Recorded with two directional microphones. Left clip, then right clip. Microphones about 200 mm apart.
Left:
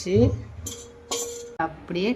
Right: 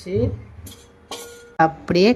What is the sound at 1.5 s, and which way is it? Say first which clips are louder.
Speech: right 12 dB; 30° right (ahead or behind).